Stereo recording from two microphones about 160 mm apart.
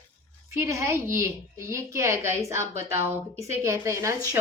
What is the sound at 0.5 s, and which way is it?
Speech, 20° right (ahead or behind).